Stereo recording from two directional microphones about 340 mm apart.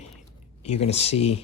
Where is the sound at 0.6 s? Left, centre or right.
Centre.